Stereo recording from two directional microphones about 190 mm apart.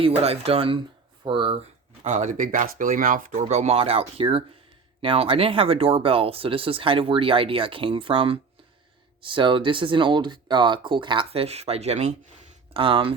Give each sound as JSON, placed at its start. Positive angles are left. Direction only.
{"t": 0.2, "sound": "speech", "side_deg": -30}
{"t": 2.0, "sound": "speech", "side_deg": -40}